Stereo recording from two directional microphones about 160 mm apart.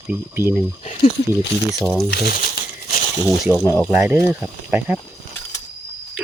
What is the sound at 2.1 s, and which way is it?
Speech, 75° left (ahead or behind).